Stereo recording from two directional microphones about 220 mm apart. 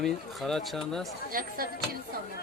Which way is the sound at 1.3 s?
40° right (ahead or behind).